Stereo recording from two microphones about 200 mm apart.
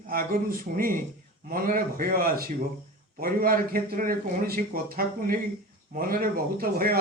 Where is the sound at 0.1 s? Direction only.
45° right (ahead or behind).